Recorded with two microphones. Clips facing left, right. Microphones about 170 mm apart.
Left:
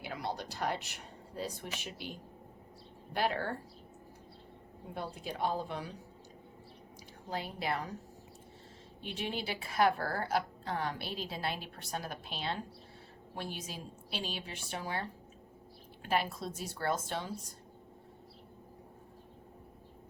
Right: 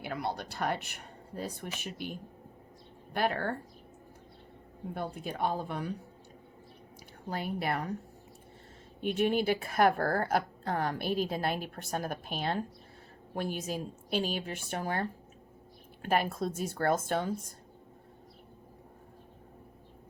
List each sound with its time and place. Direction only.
0.0 s a woman's voice: 60° right (ahead or behind)
4.9 s a woman's voice: 55° right (ahead or behind)
7.3 s speech: 55° right (ahead or behind)
9.0 s a woman's voice: 50° right (ahead or behind)
16.0 s a woman's voice: 50° right (ahead or behind)